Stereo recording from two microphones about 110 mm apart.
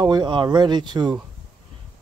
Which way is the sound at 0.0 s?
40° right (ahead or behind).